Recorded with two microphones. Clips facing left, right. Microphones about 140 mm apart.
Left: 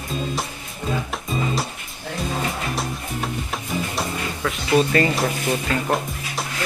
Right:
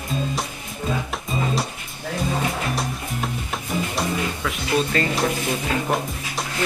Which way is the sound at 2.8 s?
Centre (ahead or behind).